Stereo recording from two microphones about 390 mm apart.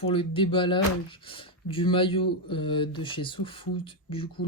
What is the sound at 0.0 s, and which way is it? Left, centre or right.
Speech, centre.